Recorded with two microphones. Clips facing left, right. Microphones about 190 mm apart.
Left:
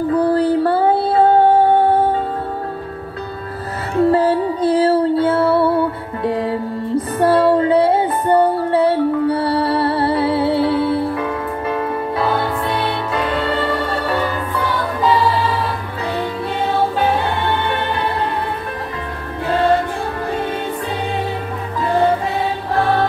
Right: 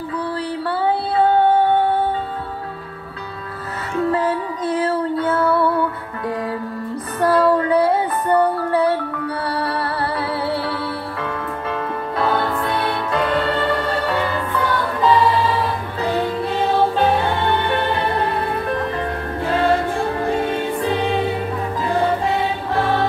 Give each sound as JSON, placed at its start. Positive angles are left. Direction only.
{"t": 0.1, "sound": "music", "side_deg": 45}
{"t": 3.9, "sound": "music", "side_deg": 35}
{"t": 12.2, "sound": "music", "side_deg": 5}